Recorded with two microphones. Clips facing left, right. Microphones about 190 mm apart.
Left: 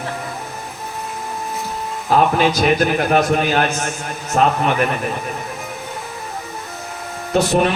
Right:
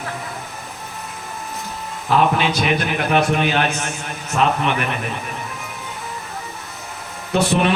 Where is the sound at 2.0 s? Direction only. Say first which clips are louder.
Left 2 dB; 40° left (ahead or behind).